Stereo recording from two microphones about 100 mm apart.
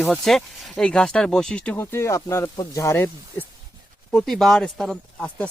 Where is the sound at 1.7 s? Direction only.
25° left (ahead or behind).